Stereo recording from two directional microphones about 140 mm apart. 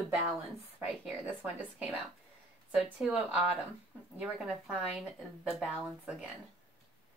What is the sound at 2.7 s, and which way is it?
A woman's voice, 10° right (ahead or behind).